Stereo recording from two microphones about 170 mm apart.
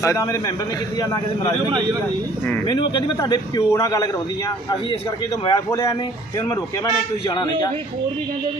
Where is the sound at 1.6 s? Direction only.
25° right (ahead or behind).